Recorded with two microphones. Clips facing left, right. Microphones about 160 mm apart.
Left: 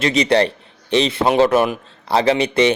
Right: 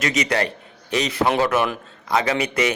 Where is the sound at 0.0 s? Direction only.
30° left (ahead or behind).